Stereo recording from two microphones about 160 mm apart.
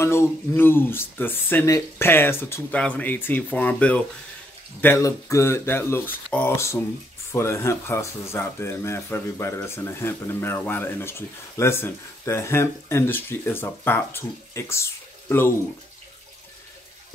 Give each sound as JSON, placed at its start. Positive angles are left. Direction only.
{"t": 0.0, "sound": "speech", "side_deg": 15}